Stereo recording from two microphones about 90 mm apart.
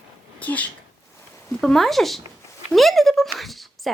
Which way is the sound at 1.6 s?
Centre (ahead or behind).